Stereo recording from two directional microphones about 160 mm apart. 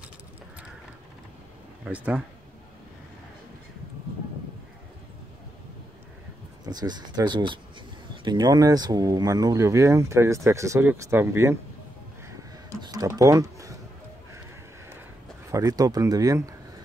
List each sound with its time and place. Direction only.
1.9 s speech: 10° right (ahead or behind)
6.6 s speech: 25° right (ahead or behind)
12.3 s a sound: 20° right (ahead or behind)
15.5 s speech: 25° right (ahead or behind)